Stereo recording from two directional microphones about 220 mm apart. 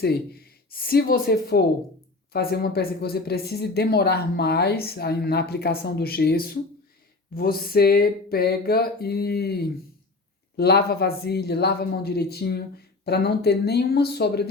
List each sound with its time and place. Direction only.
0.0 s speech: 45° left (ahead or behind)